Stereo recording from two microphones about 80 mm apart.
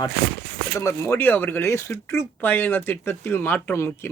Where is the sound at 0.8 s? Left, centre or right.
Left.